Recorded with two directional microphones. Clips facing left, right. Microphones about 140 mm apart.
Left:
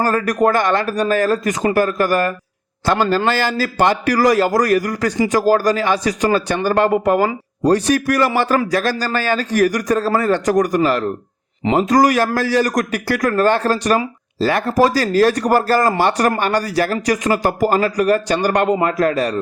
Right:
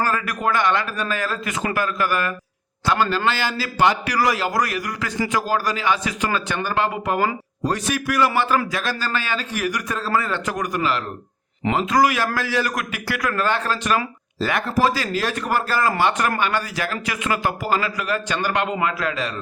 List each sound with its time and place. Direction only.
0.0 s a man's voice: 40° left (ahead or behind)